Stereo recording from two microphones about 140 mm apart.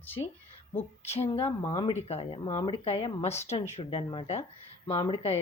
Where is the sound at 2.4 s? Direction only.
35° left (ahead or behind).